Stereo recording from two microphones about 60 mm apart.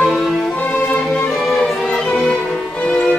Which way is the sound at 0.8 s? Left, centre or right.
Centre.